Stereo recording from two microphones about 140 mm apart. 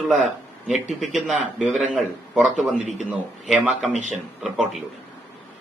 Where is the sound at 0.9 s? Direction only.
Centre (ahead or behind).